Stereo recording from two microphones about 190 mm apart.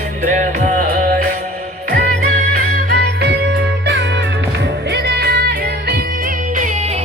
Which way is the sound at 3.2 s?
60° right (ahead or behind).